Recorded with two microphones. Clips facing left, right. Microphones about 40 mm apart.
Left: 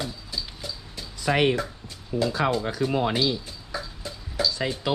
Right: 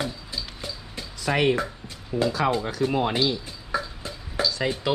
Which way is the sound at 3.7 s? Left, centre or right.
Right.